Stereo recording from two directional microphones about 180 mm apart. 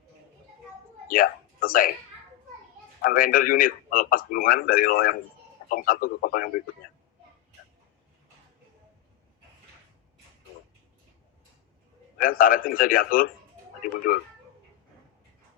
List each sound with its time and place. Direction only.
1.0 s speech: 50° left (ahead or behind)
3.0 s a man's voice: 55° left (ahead or behind)
12.2 s a man's voice: 50° left (ahead or behind)